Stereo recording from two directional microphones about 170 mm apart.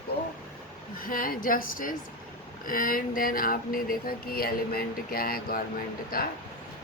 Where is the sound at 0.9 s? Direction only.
55° left (ahead or behind).